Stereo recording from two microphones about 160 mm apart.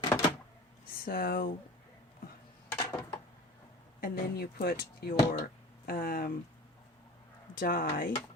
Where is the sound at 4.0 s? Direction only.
75° left (ahead or behind).